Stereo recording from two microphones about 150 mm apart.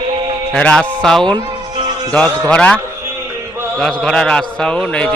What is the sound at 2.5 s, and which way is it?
A man's voice, 10° left (ahead or behind).